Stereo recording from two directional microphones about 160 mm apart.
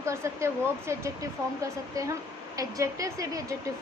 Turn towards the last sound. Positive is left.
turn(degrees=-20)  # may be behind; listen again after turning